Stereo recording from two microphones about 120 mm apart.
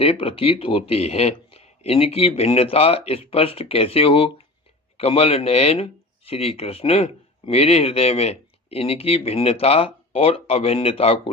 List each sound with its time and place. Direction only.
0.0 s speech: 50° left (ahead or behind)